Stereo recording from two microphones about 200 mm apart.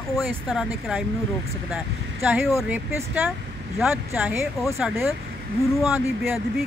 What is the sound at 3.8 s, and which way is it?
Speech, 10° right (ahead or behind).